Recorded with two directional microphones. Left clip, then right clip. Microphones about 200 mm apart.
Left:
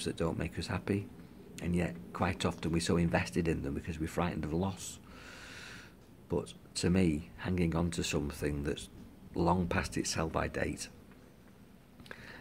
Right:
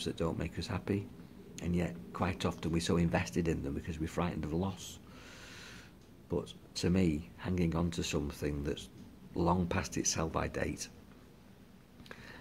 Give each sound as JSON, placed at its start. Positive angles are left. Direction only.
{"t": 0.0, "sound": "speech", "side_deg": 5}